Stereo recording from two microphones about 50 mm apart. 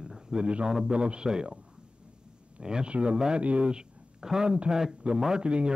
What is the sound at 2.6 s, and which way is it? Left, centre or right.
A man's voice, centre.